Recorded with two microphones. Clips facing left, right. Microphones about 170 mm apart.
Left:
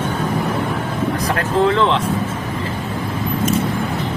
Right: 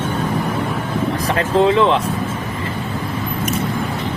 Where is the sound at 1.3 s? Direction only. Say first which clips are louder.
Right 3 dB; 20° right (ahead or behind).